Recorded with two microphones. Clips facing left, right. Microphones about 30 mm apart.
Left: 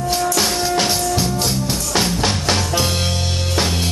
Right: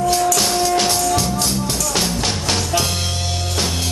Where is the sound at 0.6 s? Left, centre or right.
Centre.